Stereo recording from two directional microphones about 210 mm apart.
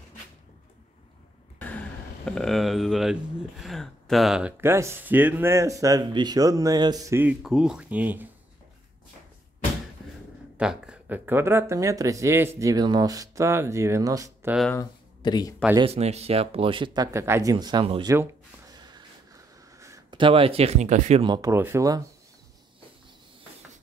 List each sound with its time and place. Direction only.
1.6 s speech: 5° left (ahead or behind)
10.6 s speech: 5° right (ahead or behind)
14.8 s a sound: 20° left (ahead or behind)
15.7 s speech: 25° right (ahead or behind)
18.1 s a sound: 15° right (ahead or behind)
19.8 s speech: 20° right (ahead or behind)